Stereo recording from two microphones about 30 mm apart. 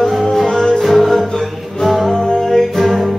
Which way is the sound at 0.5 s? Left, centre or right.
Left.